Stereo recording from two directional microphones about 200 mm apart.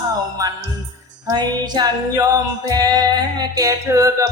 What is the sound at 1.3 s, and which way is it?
Music, 20° right (ahead or behind).